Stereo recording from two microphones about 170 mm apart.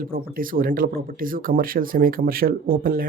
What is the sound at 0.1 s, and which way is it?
Speech, 55° right (ahead or behind).